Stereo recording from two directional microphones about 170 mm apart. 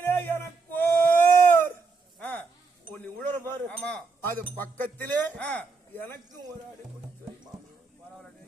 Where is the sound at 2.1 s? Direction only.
10° left (ahead or behind).